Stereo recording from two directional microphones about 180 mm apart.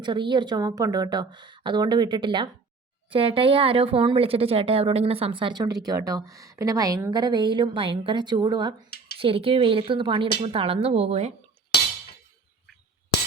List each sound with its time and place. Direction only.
0.0 s a woman's voice: 25° right (ahead or behind)